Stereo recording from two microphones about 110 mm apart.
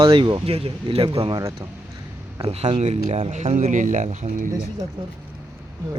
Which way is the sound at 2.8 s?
80° right.